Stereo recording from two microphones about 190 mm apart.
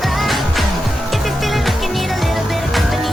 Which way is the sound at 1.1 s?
Centre (ahead or behind).